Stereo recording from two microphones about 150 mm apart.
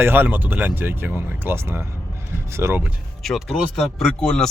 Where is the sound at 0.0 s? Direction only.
15° right (ahead or behind).